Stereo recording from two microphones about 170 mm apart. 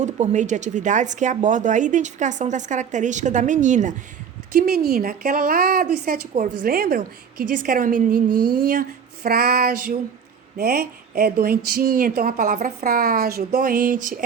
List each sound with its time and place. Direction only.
0.0 s speech: 45° right (ahead or behind)
4.5 s speech: 65° right (ahead or behind)
8.4 s a sound: 25° right (ahead or behind)
8.6 s speech: 65° right (ahead or behind)